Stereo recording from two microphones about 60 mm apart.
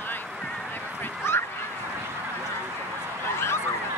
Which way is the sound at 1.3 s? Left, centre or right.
Left.